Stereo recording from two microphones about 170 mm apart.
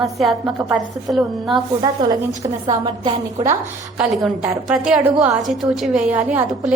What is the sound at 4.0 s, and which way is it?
A woman's voice, 5° right (ahead or behind).